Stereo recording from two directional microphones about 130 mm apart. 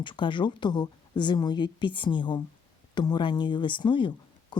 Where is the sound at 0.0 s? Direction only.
40° left (ahead or behind).